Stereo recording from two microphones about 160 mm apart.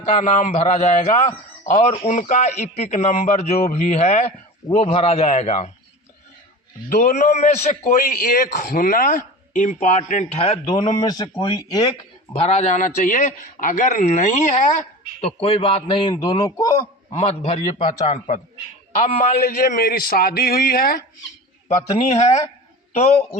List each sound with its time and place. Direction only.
0.0 s a man's voice: 45° left (ahead or behind)
6.9 s a man's voice: 55° left (ahead or behind); by 16.4 s 30° left (ahead or behind)
16.4 s speech: 20° left (ahead or behind)
17.2 s a man's voice: 40° left (ahead or behind)
19.5 s speech: 70° left (ahead or behind)
21.8 s a man's voice: 40° left (ahead or behind)